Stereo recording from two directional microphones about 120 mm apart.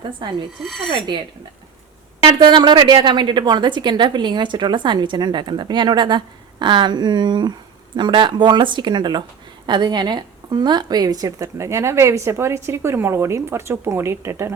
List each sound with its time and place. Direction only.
0.2 s a woman's voice: 40° right (ahead or behind)
0.6 s speech: centre (ahead or behind)
2.2 s a woman's voice: 40° right (ahead or behind); by 14.5 s 25° right (ahead or behind)